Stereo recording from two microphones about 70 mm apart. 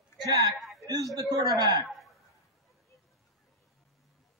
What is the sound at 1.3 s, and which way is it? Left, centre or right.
Speech, right.